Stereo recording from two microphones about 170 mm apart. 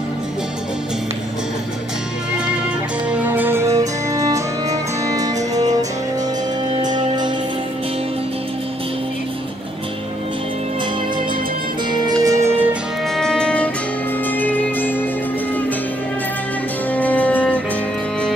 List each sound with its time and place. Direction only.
3.1 s music: 10° right (ahead or behind)
6.8 s music: 25° right (ahead or behind)
11.9 s music: 20° right (ahead or behind)
13.1 s music: 5° left (ahead or behind)
16.9 s music: 10° left (ahead or behind)